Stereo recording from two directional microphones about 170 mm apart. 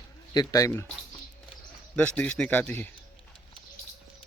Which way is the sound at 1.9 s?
5° left (ahead or behind).